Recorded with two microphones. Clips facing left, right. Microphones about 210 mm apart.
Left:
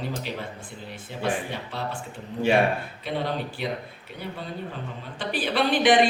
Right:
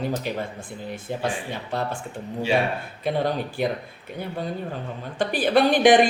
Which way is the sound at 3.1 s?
45° right (ahead or behind).